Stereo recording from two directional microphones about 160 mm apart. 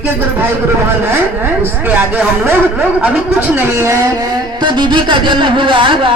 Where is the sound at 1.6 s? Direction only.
10° right (ahead or behind); by 6.1 s 30° right (ahead or behind).